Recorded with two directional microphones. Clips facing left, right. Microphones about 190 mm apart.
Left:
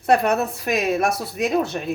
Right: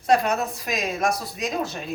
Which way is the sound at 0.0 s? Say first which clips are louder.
Left 3 dB; 60° left (ahead or behind).